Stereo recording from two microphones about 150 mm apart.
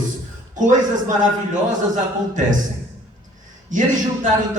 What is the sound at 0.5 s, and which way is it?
Speech, 55° right (ahead or behind).